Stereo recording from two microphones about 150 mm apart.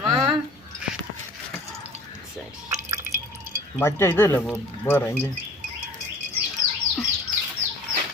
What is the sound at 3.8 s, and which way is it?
Speech, 15° left (ahead or behind).